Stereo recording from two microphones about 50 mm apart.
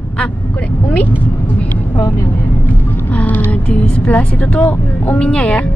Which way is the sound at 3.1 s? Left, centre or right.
Left.